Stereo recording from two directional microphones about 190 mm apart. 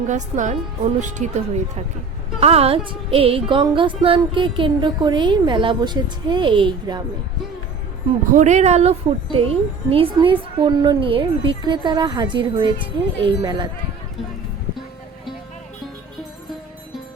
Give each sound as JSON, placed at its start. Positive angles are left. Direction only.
{"t": 0.1, "sound": "speech", "side_deg": -40}
{"t": 2.4, "sound": "music", "side_deg": -30}
{"t": 8.4, "sound": "music", "side_deg": -40}